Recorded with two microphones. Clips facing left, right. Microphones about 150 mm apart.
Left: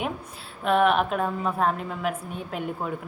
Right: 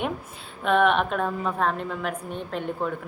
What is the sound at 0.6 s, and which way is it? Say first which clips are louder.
A woman's voice: even; centre (ahead or behind).